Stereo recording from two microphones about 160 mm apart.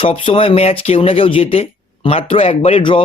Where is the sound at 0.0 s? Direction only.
35° left (ahead or behind).